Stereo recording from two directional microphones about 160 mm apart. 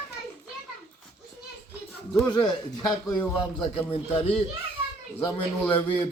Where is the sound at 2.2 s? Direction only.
25° left (ahead or behind).